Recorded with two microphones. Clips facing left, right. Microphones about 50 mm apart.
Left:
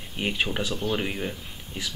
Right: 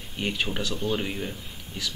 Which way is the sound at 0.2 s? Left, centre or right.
Centre.